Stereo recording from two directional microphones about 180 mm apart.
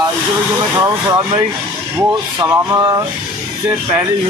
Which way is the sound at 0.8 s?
20° right (ahead or behind).